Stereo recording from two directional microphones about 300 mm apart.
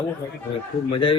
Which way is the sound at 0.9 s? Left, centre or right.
Centre.